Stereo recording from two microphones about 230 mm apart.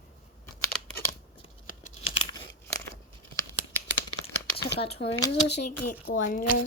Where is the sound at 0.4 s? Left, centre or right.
Centre.